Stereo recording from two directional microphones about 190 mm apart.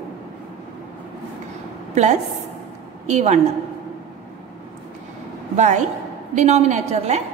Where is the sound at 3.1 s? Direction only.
40° right (ahead or behind).